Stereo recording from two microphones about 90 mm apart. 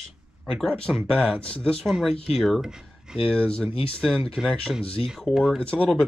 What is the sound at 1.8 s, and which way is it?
Speech, centre (ahead or behind).